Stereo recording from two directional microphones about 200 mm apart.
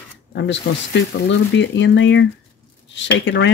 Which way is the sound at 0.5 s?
65° left (ahead or behind).